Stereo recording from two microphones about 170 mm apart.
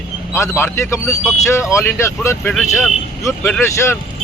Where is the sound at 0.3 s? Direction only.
15° left (ahead or behind).